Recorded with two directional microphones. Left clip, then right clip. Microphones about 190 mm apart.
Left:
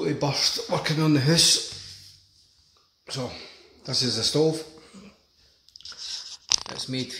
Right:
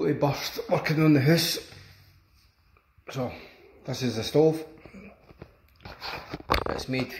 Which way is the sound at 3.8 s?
Centre (ahead or behind).